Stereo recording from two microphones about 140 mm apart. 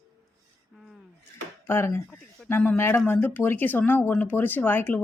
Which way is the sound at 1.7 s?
20° left (ahead or behind).